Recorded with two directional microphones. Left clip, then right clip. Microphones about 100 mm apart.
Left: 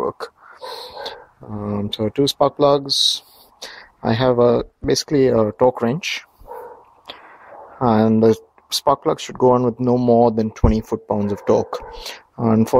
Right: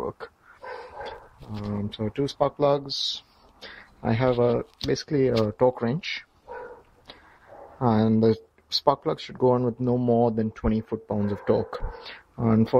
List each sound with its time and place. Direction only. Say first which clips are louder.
1.7 s speech: left 9 dB; 30° left (ahead or behind)
5.4 s speech: left 7 dB; 10° left (ahead or behind)
7.8 s speech: left 7 dB; 20° left (ahead or behind)